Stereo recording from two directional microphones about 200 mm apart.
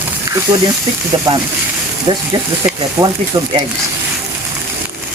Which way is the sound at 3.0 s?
10° right (ahead or behind).